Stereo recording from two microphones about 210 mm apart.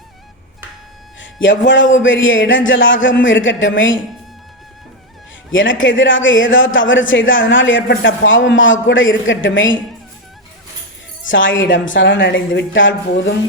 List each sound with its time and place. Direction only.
1.2 s a woman's voice: 60° left (ahead or behind)
5.5 s a woman's voice: 65° left (ahead or behind)
11.3 s a woman's voice: 65° left (ahead or behind)